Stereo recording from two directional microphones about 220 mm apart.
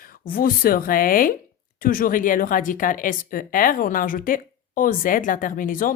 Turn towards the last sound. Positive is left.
turn(degrees=40)  # may be behind; listen again after turning